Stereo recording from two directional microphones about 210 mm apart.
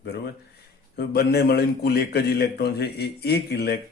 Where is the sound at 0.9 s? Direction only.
50° left (ahead or behind).